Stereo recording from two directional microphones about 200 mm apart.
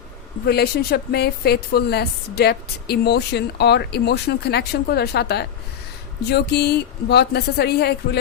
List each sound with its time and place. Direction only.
0.4 s a woman's voice: 50° left (ahead or behind)